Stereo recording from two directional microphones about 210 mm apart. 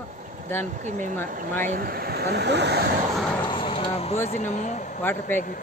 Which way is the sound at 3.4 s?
25° left (ahead or behind).